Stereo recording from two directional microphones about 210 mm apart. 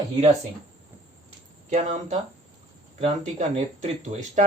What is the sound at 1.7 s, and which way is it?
Speech, 35° right (ahead or behind).